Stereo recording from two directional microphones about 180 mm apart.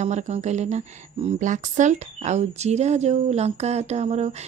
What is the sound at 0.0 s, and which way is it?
Speech, 40° right (ahead or behind).